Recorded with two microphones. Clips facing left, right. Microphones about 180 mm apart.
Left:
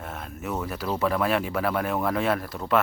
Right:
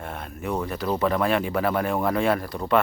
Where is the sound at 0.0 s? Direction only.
Centre (ahead or behind).